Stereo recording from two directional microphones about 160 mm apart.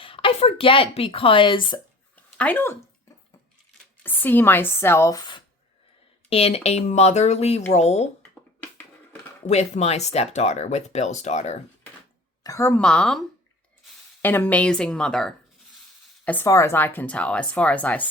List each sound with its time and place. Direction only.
0.0 s speech: 35° left (ahead or behind)
2.4 s speech: 10° left (ahead or behind)
4.0 s speech: 10° left (ahead or behind)
6.3 s speech: 40° left (ahead or behind)
9.5 s speech: 45° left (ahead or behind)
12.4 s speech: 20° left (ahead or behind)
12.8 s speech: 5° left (ahead or behind)